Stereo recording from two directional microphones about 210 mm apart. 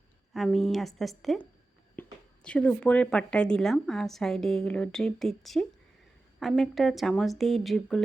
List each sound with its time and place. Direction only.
0.3 s a woman's voice: centre (ahead or behind)